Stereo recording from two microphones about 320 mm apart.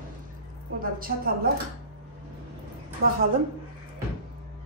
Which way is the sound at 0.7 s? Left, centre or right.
Right.